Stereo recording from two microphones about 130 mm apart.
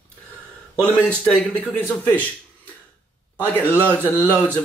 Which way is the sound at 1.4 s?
10° left (ahead or behind).